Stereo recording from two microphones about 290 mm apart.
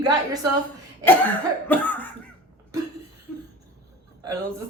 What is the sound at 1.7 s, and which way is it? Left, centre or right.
Speech, centre.